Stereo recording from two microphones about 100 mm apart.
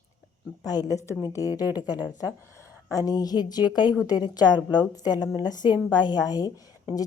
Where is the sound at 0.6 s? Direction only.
40° left (ahead or behind).